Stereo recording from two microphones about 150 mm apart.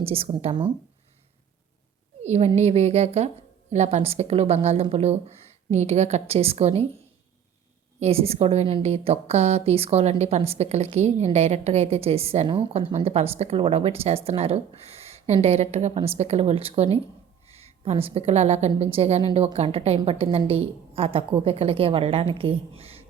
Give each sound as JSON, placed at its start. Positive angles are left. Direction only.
{"t": 0.0, "sound": "a woman's voice", "side_deg": -40}
{"t": 2.2, "sound": "a woman's voice", "side_deg": -45}
{"t": 7.9, "sound": "a woman's voice", "side_deg": -45}